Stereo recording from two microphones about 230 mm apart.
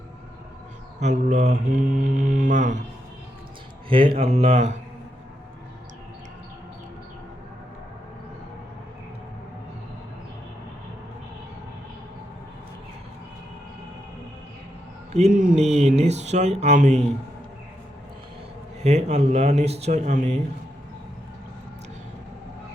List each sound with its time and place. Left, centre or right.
0.9 s mantra: right
3.8 s speech: right
15.1 s speech: right
18.8 s speech: right